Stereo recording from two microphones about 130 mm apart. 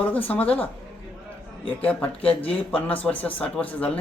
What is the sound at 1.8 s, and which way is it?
Speech, 10° left (ahead or behind).